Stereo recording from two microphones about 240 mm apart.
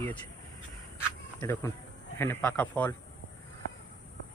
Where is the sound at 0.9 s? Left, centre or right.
Centre.